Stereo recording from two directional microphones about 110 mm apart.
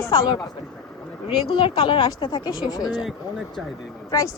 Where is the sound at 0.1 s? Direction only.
40° left (ahead or behind).